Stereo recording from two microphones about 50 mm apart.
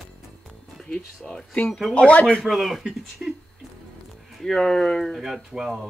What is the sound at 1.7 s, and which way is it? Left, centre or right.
Speech, centre.